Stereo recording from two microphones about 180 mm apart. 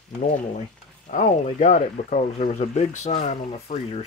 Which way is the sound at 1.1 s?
35° left (ahead or behind).